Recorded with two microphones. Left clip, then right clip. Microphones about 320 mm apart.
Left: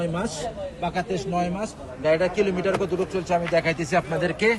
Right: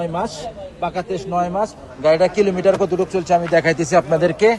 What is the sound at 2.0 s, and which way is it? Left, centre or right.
A man's voice, centre.